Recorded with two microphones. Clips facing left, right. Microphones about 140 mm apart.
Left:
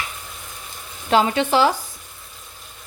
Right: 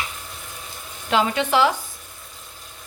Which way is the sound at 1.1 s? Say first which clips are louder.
Left 3 dB; 35° left (ahead or behind).